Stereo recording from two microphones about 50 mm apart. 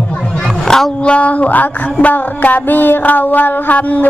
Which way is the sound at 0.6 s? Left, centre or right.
Centre.